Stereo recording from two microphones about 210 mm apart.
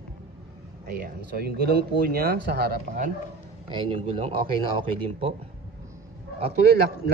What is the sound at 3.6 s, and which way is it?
Speech, 25° right (ahead or behind).